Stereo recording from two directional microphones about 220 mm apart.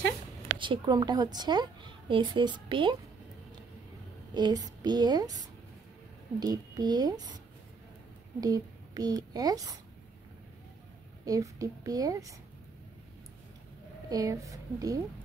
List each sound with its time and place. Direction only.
0.6 s a woman's voice: 20° right (ahead or behind)
4.3 s a woman's voice: 20° right (ahead or behind)
6.4 s a woman's voice: 20° right (ahead or behind)
8.4 s a woman's voice: 15° right (ahead or behind)
11.2 s a woman's voice: 15° right (ahead or behind)
14.0 s a woman's voice: 15° right (ahead or behind)